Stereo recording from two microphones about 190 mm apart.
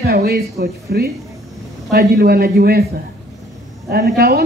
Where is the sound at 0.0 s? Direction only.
55° right (ahead or behind).